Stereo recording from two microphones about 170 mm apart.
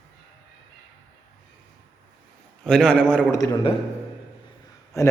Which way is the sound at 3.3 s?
20° left (ahead or behind).